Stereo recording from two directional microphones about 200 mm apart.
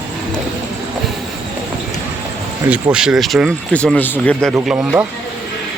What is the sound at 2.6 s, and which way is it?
Speech, 5° right (ahead or behind).